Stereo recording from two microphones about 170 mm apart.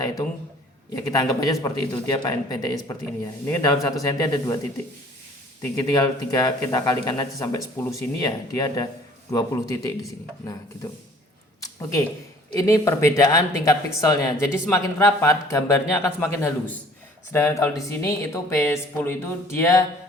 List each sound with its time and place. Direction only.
0.9 s speech: 20° left (ahead or behind)
5.7 s speech: 20° left (ahead or behind)
11.6 s a sound: 20° left (ahead or behind)
12.5 s speech: 20° left (ahead or behind)